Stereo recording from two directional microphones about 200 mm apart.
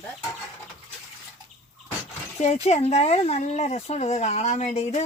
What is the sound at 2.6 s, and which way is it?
Speech, 30° left (ahead or behind).